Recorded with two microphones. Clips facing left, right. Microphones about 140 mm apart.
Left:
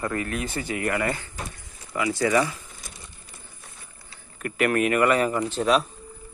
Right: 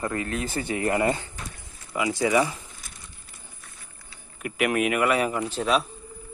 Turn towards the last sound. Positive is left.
turn(degrees=0)  # may be behind; listen again after turning